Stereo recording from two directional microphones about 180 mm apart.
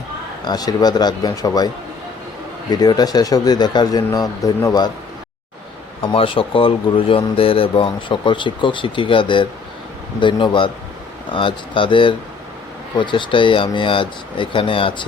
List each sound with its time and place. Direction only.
0.4 s speech: 20° left (ahead or behind)
6.0 s speech: 30° left (ahead or behind)